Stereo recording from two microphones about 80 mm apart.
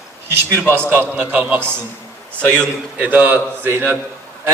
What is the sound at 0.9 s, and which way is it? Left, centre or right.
Speech, right.